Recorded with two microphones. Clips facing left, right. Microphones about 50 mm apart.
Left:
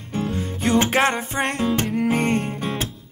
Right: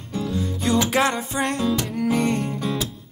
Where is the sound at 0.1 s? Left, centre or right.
Left.